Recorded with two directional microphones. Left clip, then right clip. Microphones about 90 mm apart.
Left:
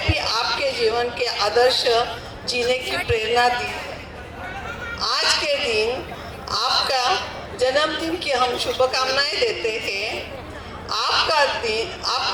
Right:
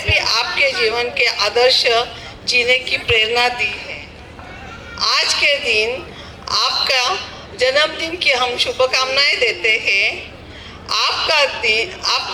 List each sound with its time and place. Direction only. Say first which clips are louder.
0.1 s a sound: right 8 dB; 25° right (ahead or behind)
2.5 s a woman's voice: right 7 dB; 25° right (ahead or behind)
4.9 s a woman's voice: right 5 dB; 25° right (ahead or behind)